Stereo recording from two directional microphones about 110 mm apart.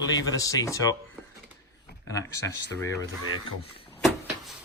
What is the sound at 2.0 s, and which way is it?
Speech, 30° left (ahead or behind).